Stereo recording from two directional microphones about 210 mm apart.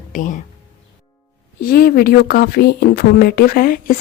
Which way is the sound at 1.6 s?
45° left (ahead or behind).